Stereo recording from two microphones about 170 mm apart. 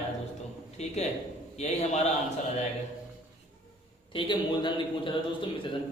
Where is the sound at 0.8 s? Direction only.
40° left (ahead or behind).